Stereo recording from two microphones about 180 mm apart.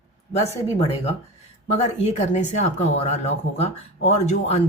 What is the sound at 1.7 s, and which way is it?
Speech, 35° left (ahead or behind).